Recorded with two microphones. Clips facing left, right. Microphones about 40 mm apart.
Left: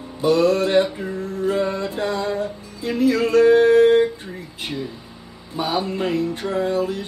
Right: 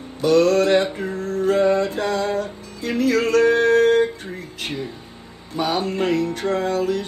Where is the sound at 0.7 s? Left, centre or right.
Right.